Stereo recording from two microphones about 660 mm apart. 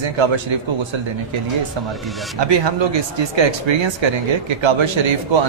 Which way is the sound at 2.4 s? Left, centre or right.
Right.